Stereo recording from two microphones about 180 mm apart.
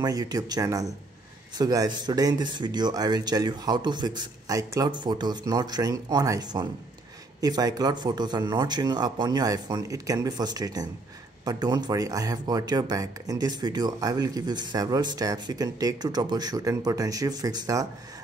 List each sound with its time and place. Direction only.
0.0 s speech: 20° right (ahead or behind)